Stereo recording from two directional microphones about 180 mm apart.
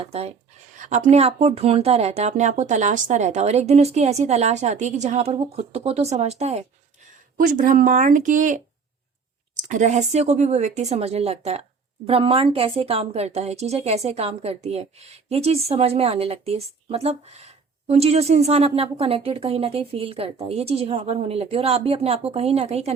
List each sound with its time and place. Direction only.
0.0 s speech: 35° right (ahead or behind)
7.3 s speech: 50° right (ahead or behind)